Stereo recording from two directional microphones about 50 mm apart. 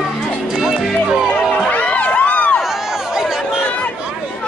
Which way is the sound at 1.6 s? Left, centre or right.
Left.